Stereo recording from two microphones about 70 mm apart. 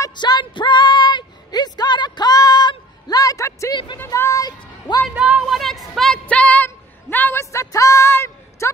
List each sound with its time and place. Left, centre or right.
0.1 s speech: left
4.5 s speech: left
5.1 s speech: right
5.5 s a woman's voice: centre
6.1 s female singing: centre
7.5 s a woman's voice: left